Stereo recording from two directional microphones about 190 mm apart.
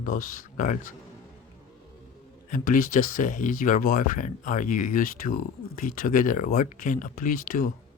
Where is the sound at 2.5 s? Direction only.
45° left (ahead or behind).